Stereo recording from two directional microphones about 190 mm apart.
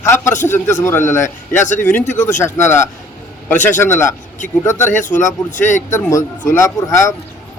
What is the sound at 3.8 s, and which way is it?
Speech, 15° left (ahead or behind).